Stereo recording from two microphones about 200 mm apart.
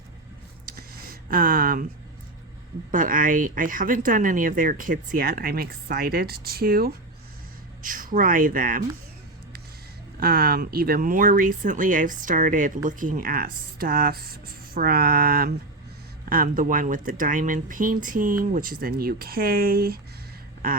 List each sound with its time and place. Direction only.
1.3 s speech: 45° right (ahead or behind)
2.9 s speech: 40° right (ahead or behind)
10.2 s speech: 45° right (ahead or behind)